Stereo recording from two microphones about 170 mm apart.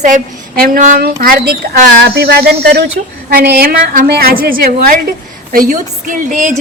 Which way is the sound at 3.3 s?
65° right (ahead or behind).